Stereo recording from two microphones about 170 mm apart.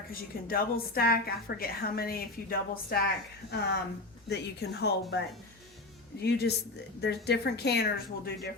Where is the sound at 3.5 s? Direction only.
70° left (ahead or behind).